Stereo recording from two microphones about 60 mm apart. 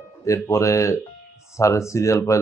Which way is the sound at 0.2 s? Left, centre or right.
Left.